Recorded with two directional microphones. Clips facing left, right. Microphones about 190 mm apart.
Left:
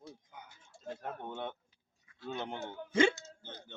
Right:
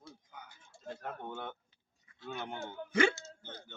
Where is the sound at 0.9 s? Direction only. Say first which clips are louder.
Left 1 dB; 20° left (ahead or behind).